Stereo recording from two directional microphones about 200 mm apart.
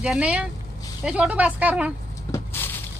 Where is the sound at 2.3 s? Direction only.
10° left (ahead or behind).